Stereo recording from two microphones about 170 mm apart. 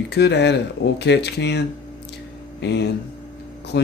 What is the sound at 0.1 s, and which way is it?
Speech, 85° left.